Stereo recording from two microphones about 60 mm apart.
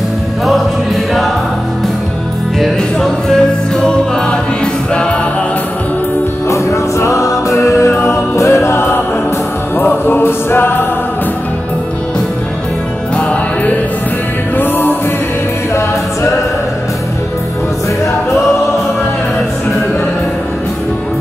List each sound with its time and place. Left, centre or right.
2.6 s music: centre
6.5 s music: left
9.8 s music: left
14.6 s music: left